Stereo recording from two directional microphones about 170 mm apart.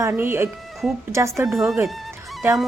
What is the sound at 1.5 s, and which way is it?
Speech, centre (ahead or behind).